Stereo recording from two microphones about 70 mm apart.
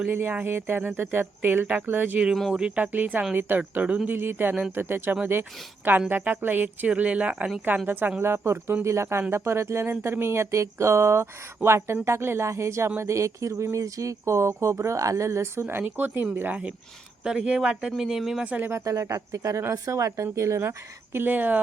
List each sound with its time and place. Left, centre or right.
0.1 s speech: right
7.9 s speech: right
17.2 s speech: centre
18.4 s speech: right
18.9 s speech: right